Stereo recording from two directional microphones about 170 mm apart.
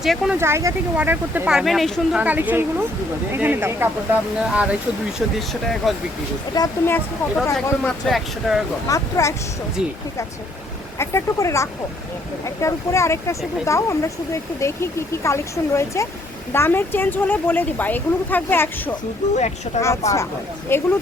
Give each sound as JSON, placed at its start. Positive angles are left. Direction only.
{"t": 0.0, "sound": "speech", "side_deg": 0}
{"t": 0.3, "sound": "speech", "side_deg": -15}
{"t": 5.8, "sound": "speech", "side_deg": 0}
{"t": 6.5, "sound": "speech", "side_deg": 20}
{"t": 6.9, "sound": "speech", "side_deg": 5}
{"t": 8.9, "sound": "speech", "side_deg": 20}
{"t": 10.9, "sound": "speech", "side_deg": 15}
{"t": 19.3, "sound": "speech", "side_deg": 40}
{"t": 20.7, "sound": "speech", "side_deg": 15}